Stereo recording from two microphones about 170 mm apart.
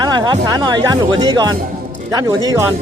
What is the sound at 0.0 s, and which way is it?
Speech, 25° right (ahead or behind).